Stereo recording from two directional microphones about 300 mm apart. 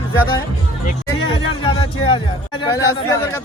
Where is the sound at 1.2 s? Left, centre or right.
Centre.